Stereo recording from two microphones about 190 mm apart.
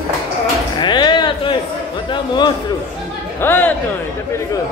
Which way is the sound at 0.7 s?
25° left (ahead or behind).